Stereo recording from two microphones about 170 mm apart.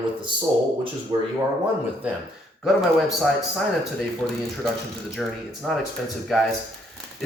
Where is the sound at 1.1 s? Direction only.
30° right (ahead or behind).